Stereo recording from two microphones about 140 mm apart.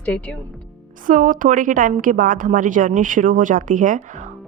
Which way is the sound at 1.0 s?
70° right (ahead or behind).